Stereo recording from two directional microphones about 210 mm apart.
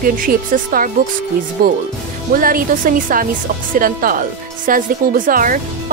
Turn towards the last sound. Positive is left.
turn(degrees=-40)  # may be behind; listen again after turning